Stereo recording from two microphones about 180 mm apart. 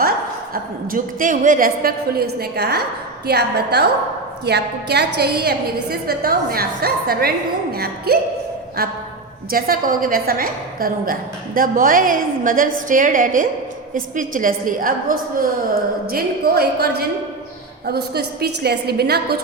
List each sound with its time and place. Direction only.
0.5 s a woman's voice: 50° right (ahead or behind)